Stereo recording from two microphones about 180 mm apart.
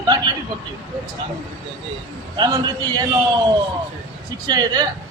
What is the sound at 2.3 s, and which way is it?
Speech, 25° right (ahead or behind).